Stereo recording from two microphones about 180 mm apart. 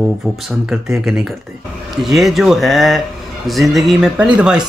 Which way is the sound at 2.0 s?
Centre (ahead or behind).